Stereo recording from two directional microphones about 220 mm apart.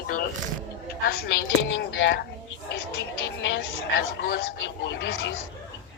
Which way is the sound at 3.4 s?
55° left (ahead or behind).